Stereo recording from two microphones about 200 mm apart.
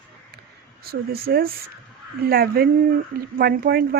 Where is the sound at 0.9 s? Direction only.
50° right (ahead or behind).